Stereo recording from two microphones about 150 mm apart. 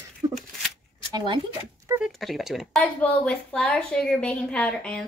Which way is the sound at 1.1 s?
35° right (ahead or behind).